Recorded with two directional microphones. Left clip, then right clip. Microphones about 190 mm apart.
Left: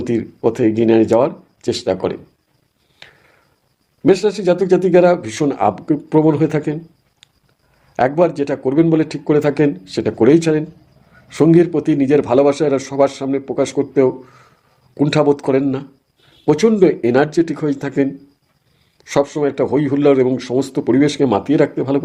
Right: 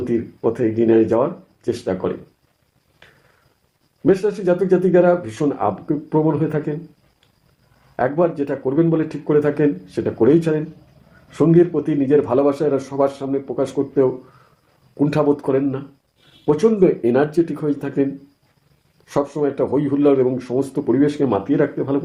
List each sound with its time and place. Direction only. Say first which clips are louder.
0.0 s speech: left 3 dB; 40° left (ahead or behind)
3.0 s a sound: left 7 dB; 40° left (ahead or behind)
4.0 s speech: left 3 dB; 40° left (ahead or behind)
7.9 s speech: left 4 dB; 45° left (ahead or behind)